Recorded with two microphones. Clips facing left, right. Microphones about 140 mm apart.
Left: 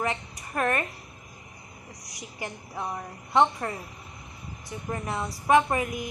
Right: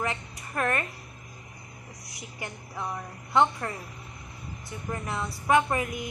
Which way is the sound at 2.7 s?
15° left (ahead or behind).